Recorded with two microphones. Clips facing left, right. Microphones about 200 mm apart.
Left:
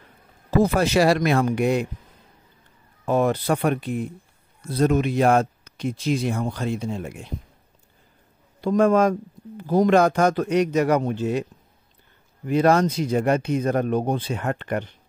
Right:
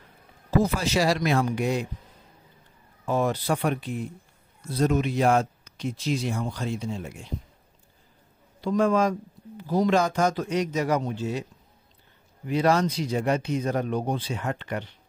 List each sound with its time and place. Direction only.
0.6 s speech: 60° left (ahead or behind)
3.1 s speech: 60° left (ahead or behind)
8.5 s speech: 55° left (ahead or behind)
12.4 s speech: 50° left (ahead or behind)